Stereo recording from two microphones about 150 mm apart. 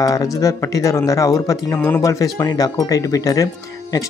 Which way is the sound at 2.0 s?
25° left (ahead or behind).